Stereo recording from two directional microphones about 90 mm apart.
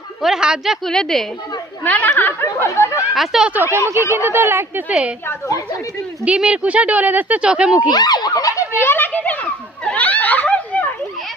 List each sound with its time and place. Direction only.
0.2 s speech: 5° right (ahead or behind)
1.8 s speech: 20° left (ahead or behind)
3.2 s speech: 5° right (ahead or behind)
3.5 s speech: 25° right (ahead or behind)
4.9 s speech: 15° right (ahead or behind)
5.3 s a woman's voice: 35° left (ahead or behind)
6.2 s speech: 15° right (ahead or behind)
7.9 s a sound: 50° left (ahead or behind)
8.8 s children playing: 25° left (ahead or behind)